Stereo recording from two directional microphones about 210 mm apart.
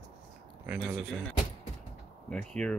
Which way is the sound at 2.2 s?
5° left (ahead or behind).